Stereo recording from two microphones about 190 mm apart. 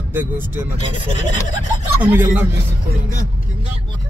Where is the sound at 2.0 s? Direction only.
10° right (ahead or behind).